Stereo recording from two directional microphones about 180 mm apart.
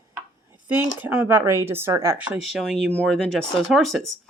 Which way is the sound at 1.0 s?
10° right (ahead or behind).